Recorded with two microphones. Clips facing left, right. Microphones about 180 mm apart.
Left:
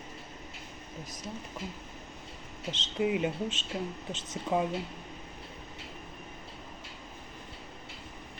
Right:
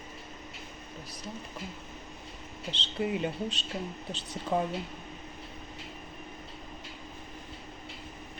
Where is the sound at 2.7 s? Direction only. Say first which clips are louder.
Left 2 dB; 5° left (ahead or behind).